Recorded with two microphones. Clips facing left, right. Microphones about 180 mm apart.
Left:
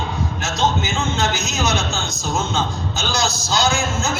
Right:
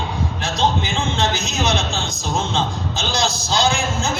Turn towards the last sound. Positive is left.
turn(degrees=-30)  # may be behind; listen again after turning